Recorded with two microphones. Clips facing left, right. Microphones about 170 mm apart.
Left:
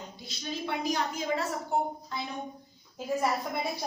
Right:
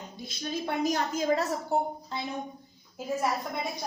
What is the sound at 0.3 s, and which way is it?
A woman's voice, 45° right (ahead or behind).